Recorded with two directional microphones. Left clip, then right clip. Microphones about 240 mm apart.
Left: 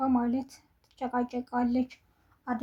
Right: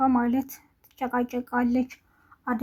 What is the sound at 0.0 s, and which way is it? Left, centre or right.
Speech, centre.